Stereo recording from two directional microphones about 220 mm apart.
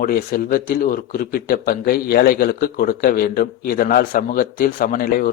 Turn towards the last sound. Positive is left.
turn(degrees=40)  # may be behind; listen again after turning